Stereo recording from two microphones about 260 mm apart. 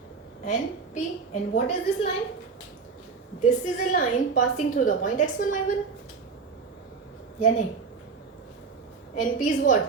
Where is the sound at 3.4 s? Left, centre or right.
Left.